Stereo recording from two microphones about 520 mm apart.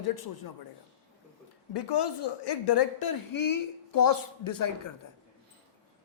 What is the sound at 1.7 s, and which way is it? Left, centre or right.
Speech, left.